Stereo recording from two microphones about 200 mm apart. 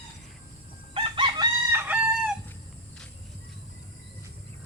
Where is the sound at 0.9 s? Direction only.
25° right (ahead or behind).